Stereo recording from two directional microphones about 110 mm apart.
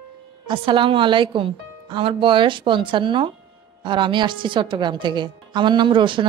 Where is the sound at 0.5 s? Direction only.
50° right (ahead or behind).